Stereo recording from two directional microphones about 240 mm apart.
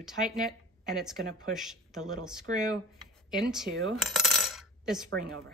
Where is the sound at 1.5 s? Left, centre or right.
Centre.